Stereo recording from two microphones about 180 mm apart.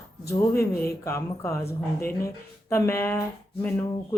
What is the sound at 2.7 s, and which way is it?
Speech, 15° left (ahead or behind).